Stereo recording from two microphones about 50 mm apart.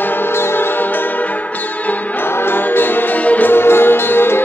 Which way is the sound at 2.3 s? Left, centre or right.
Left.